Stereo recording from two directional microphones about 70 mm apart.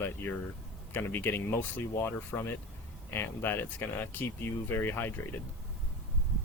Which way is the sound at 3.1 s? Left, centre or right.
Left.